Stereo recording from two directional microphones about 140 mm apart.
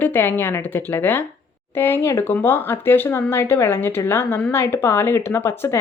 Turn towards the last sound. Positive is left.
turn(degrees=15)  # may be behind; listen again after turning